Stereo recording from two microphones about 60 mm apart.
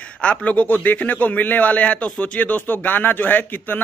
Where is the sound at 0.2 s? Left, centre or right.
Centre.